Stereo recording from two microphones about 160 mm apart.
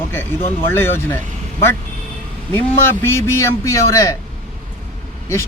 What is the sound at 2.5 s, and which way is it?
Speech, 15° left (ahead or behind).